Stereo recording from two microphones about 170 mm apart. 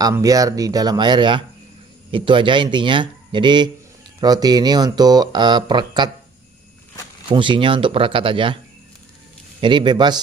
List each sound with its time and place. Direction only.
0.0 s speech: 20° right (ahead or behind)
7.2 s speech: 30° right (ahead or behind)
9.6 s speech: 25° right (ahead or behind)